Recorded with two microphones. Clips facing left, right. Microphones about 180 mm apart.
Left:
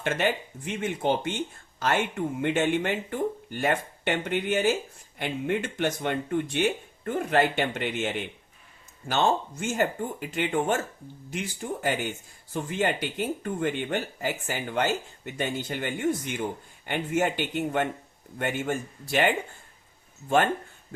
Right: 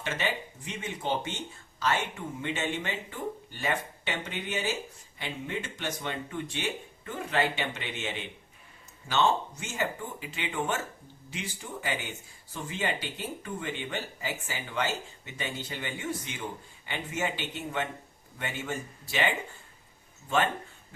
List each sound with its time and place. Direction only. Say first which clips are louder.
0.0 s speech: left 6 dB; 55° left (ahead or behind)